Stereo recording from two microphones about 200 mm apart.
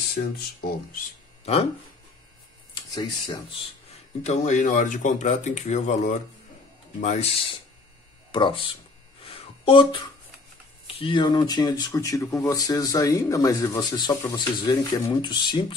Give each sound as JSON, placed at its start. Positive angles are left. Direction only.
{"t": 0.1, "sound": "speech", "side_deg": 50}
{"t": 1.4, "sound": "speech", "side_deg": 30}
{"t": 2.7, "sound": "speech", "side_deg": 20}
{"t": 3.9, "sound": "speech", "side_deg": 35}
{"t": 9.2, "sound": "a sound", "side_deg": 25}
{"t": 10.9, "sound": "speech", "side_deg": 25}